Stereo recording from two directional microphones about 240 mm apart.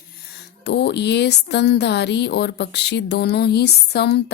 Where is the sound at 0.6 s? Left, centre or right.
Left.